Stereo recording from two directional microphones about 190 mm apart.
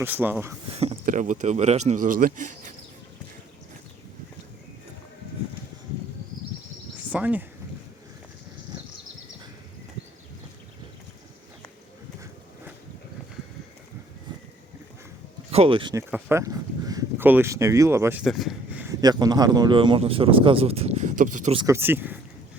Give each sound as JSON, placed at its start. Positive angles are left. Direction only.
{"t": 0.0, "sound": "speech", "side_deg": -10}
{"t": 0.7, "sound": "a sound", "side_deg": -35}
{"t": 1.0, "sound": "speech", "side_deg": -40}
{"t": 6.9, "sound": "a sound", "side_deg": -10}
{"t": 15.4, "sound": "speech", "side_deg": -30}
{"t": 18.9, "sound": "speech", "side_deg": -20}
{"t": 21.5, "sound": "speech", "side_deg": -25}
{"t": 21.8, "sound": "speech", "side_deg": -10}